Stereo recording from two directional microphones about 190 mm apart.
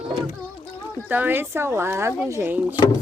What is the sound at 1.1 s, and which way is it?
Speech, 10° right (ahead or behind).